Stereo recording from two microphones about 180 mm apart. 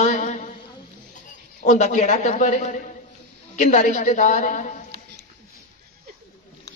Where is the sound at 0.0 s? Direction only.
40° left (ahead or behind).